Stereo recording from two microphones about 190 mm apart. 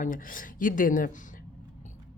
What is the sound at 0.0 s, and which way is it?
Speech, 45° left (ahead or behind).